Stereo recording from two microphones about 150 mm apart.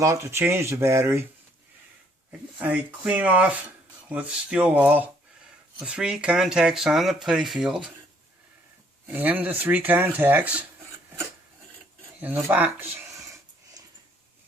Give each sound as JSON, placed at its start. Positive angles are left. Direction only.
{"t": 0.0, "sound": "speech", "side_deg": -20}
{"t": 2.6, "sound": "speech", "side_deg": -10}
{"t": 9.1, "sound": "speech", "side_deg": -10}
{"t": 12.2, "sound": "speech", "side_deg": -10}